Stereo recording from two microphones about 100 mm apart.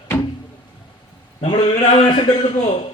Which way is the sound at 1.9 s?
55° left (ahead or behind).